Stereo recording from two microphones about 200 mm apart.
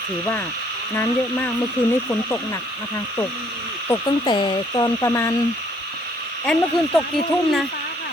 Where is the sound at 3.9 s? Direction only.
25° left (ahead or behind).